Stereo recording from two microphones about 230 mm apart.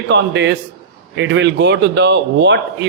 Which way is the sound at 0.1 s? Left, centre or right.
Right.